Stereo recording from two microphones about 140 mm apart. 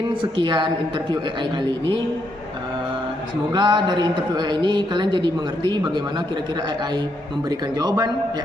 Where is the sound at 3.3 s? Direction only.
30° right (ahead or behind).